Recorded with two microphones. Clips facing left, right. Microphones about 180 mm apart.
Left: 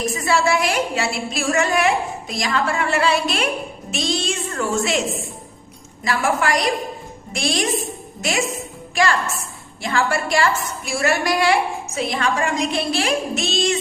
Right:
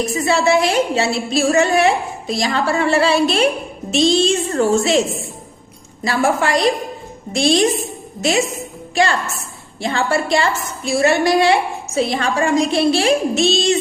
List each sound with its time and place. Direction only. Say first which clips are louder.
0.1 s a woman's voice: right 4 dB; 25° right (ahead or behind)
6.1 s a woman's voice: right 3 dB; 30° right (ahead or behind)
9.8 s a woman's voice: right 3 dB; 25° right (ahead or behind)